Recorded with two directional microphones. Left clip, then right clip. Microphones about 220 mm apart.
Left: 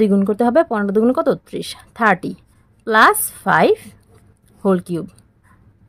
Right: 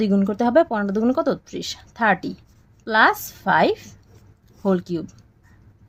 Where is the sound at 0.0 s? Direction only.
25° left (ahead or behind).